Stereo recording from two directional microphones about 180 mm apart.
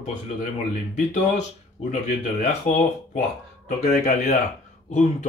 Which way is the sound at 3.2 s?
45° left (ahead or behind).